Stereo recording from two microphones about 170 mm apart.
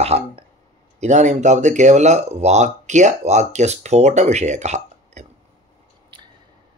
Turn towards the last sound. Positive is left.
turn(degrees=-30)  # may be behind; listen again after turning